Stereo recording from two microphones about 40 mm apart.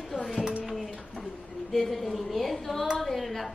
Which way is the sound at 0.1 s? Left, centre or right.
Centre.